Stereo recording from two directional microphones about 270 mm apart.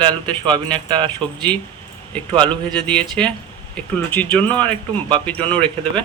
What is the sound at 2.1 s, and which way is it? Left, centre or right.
Speech, centre.